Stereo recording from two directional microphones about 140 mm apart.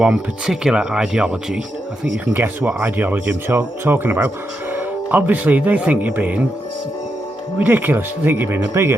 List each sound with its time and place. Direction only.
0.0 s speech: 5° right (ahead or behind)
7.6 s speech: 15° right (ahead or behind)